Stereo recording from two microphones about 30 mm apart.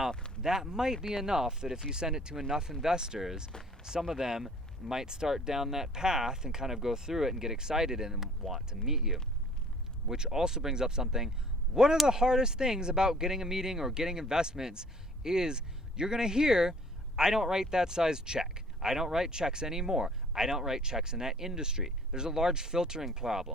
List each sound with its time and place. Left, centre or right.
0.4 s speech: centre
3.5 s speech: left
4.2 s speech: centre